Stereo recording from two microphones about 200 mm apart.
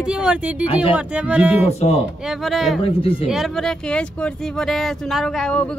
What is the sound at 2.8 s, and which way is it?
Speech, 25° left (ahead or behind).